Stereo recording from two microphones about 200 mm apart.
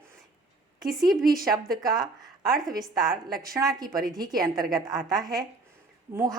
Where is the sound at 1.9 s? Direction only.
20° right (ahead or behind).